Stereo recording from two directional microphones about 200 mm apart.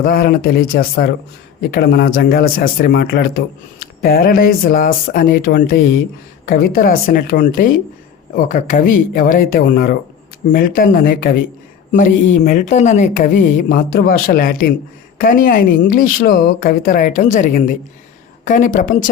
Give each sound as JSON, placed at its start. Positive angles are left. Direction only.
{"t": 0.0, "sound": "a man's voice", "side_deg": 45}